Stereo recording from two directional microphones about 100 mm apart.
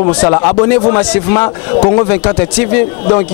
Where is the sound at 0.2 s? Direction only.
20° left (ahead or behind).